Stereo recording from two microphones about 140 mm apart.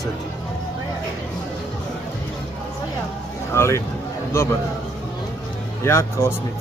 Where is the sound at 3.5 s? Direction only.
20° left (ahead or behind).